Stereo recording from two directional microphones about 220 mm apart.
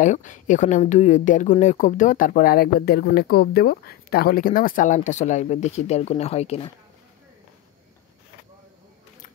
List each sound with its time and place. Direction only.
0.0 s speech: 35° left (ahead or behind)